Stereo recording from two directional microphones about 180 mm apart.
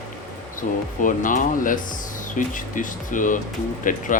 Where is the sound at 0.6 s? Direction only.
45° left (ahead or behind).